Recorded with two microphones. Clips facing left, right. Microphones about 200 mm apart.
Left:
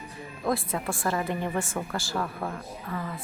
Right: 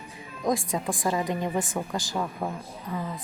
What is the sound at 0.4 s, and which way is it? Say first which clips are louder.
A woman's voice: right 2 dB; 15° right (ahead or behind).